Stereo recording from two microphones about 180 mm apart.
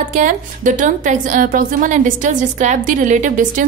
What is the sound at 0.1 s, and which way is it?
A woman's voice, 45° right (ahead or behind).